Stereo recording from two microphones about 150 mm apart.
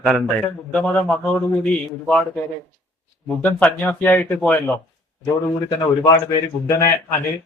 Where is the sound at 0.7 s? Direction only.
10° left (ahead or behind).